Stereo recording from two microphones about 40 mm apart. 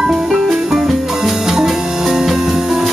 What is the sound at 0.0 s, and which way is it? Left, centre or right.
Music, centre.